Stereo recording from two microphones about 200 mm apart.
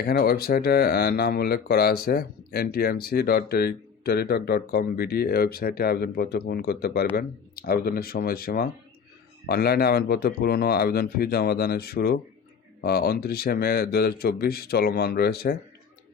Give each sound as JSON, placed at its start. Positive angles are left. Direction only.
{"t": 0.0, "sound": "speech", "side_deg": 50}